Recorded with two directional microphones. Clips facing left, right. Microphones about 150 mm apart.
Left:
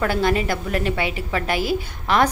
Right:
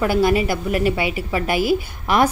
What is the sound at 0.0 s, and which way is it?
A woman's voice, 10° right (ahead or behind).